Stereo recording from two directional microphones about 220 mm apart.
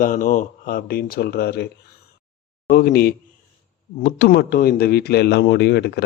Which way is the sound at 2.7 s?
45° left (ahead or behind).